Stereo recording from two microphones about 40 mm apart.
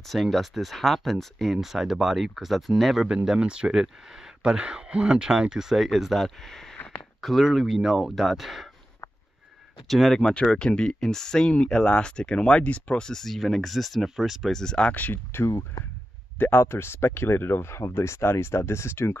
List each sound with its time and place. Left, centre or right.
0.1 s speech: centre
1.6 s speech: centre
3.3 s speech: right
5.8 s speech: centre
6.1 s speech: centre
9.8 s speech: centre
10.5 s speech: left
11.5 s speech: left
12.6 s speech: left
13.0 s speech: centre
14.4 s speech: centre
15.3 s speech: left